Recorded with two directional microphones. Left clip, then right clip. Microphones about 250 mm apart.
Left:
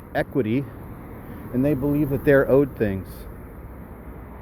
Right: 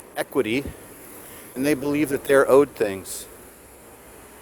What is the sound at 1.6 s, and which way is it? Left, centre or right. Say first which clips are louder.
Speech: right 1 dB; right.